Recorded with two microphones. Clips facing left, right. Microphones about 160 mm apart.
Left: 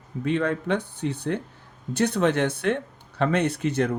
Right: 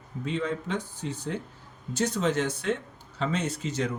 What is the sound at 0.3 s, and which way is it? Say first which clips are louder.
Speech: left 6 dB; 60° left (ahead or behind).